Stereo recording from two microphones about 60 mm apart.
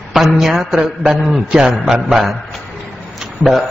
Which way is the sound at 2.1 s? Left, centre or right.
Centre.